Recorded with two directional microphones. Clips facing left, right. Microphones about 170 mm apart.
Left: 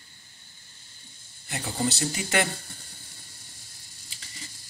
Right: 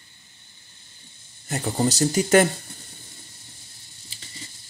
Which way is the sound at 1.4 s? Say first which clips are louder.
Right 5 dB; 40° right (ahead or behind).